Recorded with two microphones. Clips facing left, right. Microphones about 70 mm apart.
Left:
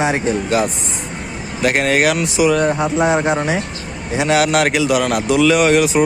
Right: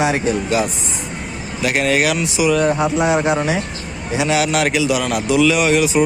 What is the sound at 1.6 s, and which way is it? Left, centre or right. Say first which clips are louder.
A man's voice: left 2 dB; left.